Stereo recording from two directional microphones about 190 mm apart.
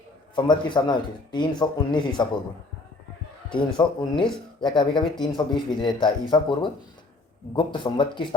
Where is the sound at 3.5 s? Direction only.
25° left (ahead or behind).